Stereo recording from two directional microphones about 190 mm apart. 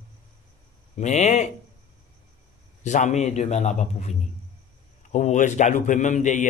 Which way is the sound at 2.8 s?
40° left (ahead or behind).